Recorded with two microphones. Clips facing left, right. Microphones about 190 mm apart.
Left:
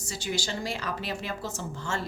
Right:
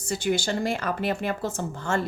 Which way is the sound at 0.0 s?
55° right (ahead or behind).